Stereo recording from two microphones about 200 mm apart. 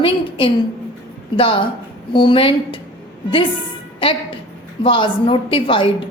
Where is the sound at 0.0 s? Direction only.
25° left (ahead or behind).